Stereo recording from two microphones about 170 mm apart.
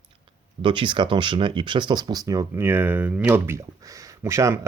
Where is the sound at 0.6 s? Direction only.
30° right (ahead or behind).